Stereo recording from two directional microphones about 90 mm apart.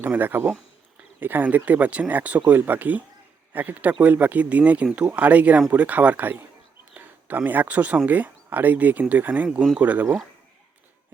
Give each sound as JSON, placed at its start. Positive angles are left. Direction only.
{"t": 0.0, "sound": "speech", "side_deg": -20}